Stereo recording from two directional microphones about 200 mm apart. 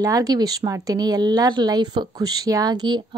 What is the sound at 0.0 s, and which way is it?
Speech, 15° right (ahead or behind).